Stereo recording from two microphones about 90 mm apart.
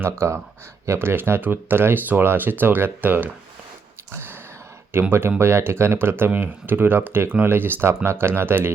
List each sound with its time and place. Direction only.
0.0 s speech: 30° right (ahead or behind)
4.1 s a sound: 25° right (ahead or behind)
4.9 s speech: 25° right (ahead or behind)